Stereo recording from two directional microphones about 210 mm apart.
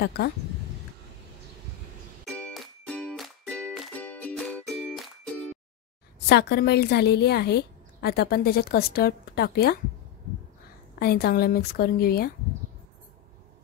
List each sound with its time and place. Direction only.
2.2 s music: 5° left (ahead or behind)
6.1 s a woman's voice: 50° left (ahead or behind)
11.0 s a woman's voice: 45° left (ahead or behind)